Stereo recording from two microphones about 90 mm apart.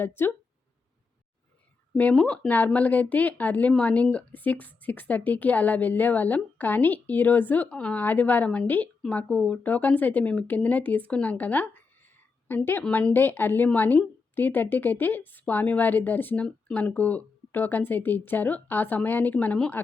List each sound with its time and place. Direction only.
0.0 s a woman's voice: 25° left (ahead or behind)
2.0 s a woman's voice: 15° left (ahead or behind)